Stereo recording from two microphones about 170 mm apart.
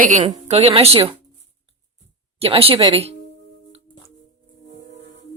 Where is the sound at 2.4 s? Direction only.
35° right (ahead or behind).